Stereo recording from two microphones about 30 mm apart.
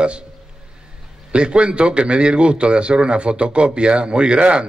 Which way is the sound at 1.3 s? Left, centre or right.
Right.